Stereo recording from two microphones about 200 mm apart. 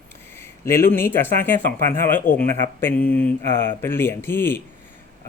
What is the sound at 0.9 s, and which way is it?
Speech, 10° left (ahead or behind).